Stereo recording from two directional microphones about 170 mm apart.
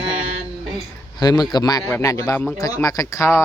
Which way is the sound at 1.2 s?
25° left (ahead or behind).